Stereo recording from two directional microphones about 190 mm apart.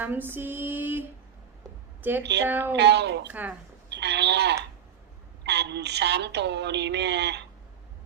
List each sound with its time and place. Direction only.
0.0 s female singing: 10° right (ahead or behind)
2.0 s a woman's voice: 10° right (ahead or behind)
2.5 s female singing: 10° right (ahead or behind)
2.7 s a woman's voice: 60° right (ahead or behind)